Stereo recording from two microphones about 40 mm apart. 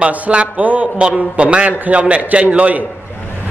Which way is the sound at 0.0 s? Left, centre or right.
Right.